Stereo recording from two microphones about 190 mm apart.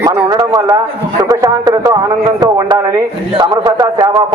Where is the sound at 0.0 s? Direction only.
20° right (ahead or behind).